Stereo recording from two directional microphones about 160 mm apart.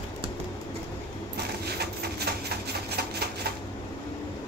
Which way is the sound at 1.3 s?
90° right.